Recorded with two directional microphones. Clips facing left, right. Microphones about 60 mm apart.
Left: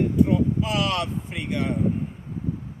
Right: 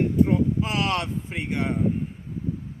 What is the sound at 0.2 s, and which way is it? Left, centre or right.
Speech, right.